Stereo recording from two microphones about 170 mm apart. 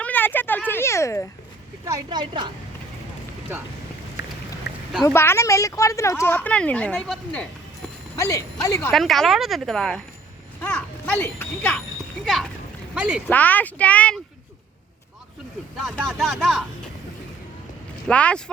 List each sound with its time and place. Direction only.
0.0 s a sound: 10° left (ahead or behind)
1.8 s a woman's voice: 20° right (ahead or behind)
3.5 s speech: 10° right (ahead or behind)
4.2 s a sound: 90° left
4.7 s boat: 90° left
5.0 s a woman's voice: 15° left (ahead or behind)
8.1 s a woman's voice: 20° left (ahead or behind)
8.9 s speech: centre (ahead or behind)
10.6 s a sound: 10° left (ahead or behind)
12.2 s speech: centre (ahead or behind)
13.2 s a woman's voice: 10° left (ahead or behind)
15.8 s speech: centre (ahead or behind)
18.1 s a woman's voice: 5° left (ahead or behind)